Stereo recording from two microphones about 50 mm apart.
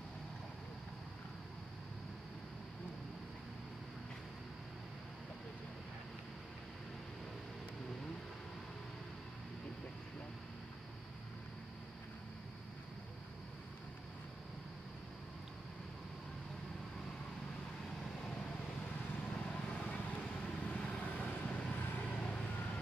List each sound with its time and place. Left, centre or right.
19.3 s vehicle: centre
22.0 s vehicle: left